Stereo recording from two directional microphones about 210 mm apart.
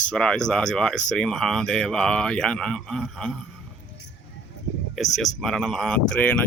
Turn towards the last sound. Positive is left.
turn(degrees=5)  # may be behind; listen again after turning